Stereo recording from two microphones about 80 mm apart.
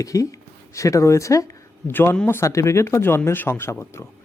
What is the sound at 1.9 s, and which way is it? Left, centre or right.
Speech, left.